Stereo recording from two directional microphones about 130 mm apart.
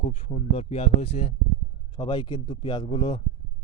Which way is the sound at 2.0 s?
35° left (ahead or behind).